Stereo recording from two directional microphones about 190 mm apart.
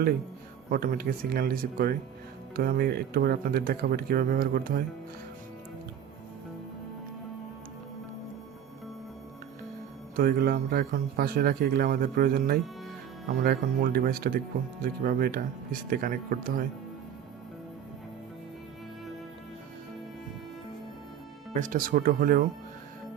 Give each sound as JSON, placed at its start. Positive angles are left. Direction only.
{"t": 0.7, "sound": "speech", "side_deg": -50}
{"t": 10.2, "sound": "speech", "side_deg": -50}
{"t": 21.5, "sound": "speech", "side_deg": -45}